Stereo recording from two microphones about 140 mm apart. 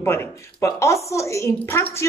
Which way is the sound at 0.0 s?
15° left (ahead or behind).